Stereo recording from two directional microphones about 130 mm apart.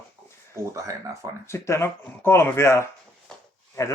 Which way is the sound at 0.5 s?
25° right (ahead or behind).